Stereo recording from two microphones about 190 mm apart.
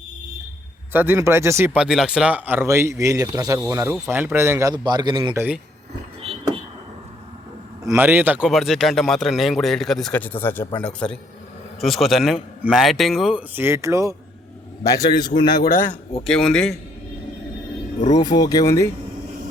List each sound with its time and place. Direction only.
0.9 s speech: 10° right (ahead or behind)
7.9 s a man's voice: 10° right (ahead or behind)
14.8 s speech: 20° left (ahead or behind)
15.6 s a man's voice: 45° left (ahead or behind)
16.2 s a man's voice: 5° left (ahead or behind)
18.1 s speech: 20° left (ahead or behind)